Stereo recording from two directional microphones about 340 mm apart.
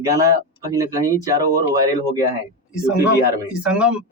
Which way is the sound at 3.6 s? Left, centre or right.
Centre.